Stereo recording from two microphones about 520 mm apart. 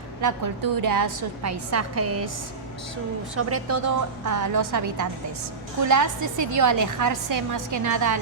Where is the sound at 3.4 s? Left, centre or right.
Right.